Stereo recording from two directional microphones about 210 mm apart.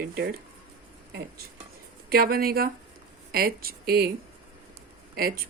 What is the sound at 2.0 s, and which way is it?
Speech, 45° right (ahead or behind).